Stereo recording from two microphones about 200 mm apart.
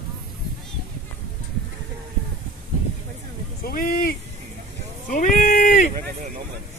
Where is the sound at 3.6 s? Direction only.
50° left (ahead or behind).